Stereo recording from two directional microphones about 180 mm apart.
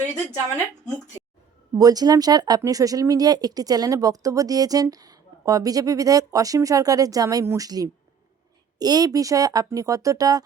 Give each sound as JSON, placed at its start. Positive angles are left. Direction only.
{"t": 1.7, "sound": "speech", "side_deg": -20}